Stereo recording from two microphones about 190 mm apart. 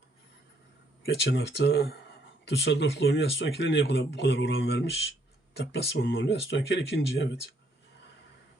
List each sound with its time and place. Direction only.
1.0 s speech: 60° left (ahead or behind); by 4.9 s 80° left
5.5 s speech: 65° left (ahead or behind)